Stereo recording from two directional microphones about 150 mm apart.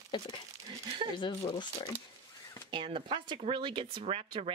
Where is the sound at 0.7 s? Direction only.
35° right (ahead or behind).